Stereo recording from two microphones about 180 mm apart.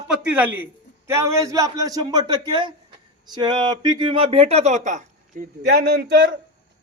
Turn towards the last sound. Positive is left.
turn(degrees=-60)  # may be behind; listen again after turning